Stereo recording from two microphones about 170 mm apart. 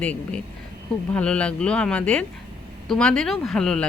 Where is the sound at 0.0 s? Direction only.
5° left (ahead or behind).